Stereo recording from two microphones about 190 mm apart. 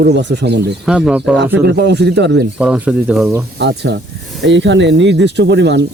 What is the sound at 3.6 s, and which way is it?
Speech, 65° right (ahead or behind).